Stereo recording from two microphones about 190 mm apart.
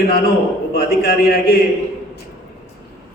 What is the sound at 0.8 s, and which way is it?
Speech, 50° left (ahead or behind).